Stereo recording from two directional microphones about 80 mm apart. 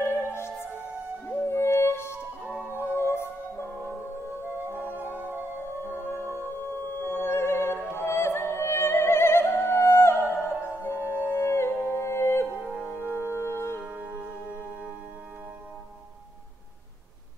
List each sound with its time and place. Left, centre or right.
0.0 s music: left
1.5 s music: left
4.6 s music: right
6.0 s music: left
13.0 s music: right
13.3 s music: left
13.8 s music: right